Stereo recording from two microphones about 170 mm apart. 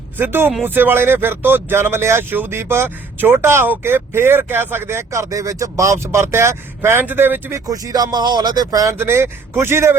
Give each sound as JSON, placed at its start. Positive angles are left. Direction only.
{"t": 0.2, "sound": "speech", "side_deg": -15}